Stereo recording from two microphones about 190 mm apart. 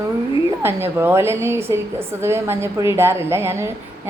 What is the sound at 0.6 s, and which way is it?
A woman's voice, 10° right (ahead or behind).